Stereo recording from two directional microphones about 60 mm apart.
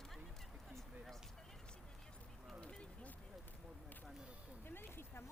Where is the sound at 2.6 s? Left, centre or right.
Centre.